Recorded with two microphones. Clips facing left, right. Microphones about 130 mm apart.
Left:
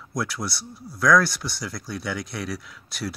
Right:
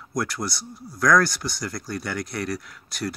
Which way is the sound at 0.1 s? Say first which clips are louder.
Right 1 dB; centre (ahead or behind).